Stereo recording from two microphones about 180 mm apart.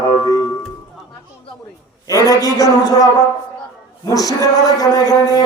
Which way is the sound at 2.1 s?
20° left (ahead or behind).